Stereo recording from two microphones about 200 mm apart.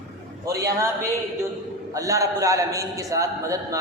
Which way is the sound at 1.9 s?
15° right (ahead or behind).